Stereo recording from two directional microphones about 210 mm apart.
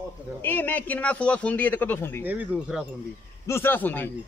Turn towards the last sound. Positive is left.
turn(degrees=10)  # may be behind; listen again after turning